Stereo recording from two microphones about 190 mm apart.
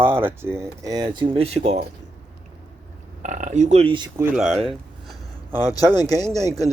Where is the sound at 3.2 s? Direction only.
40° right (ahead or behind).